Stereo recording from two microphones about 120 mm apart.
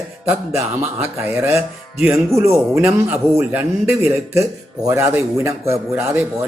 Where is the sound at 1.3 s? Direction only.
20° right (ahead or behind).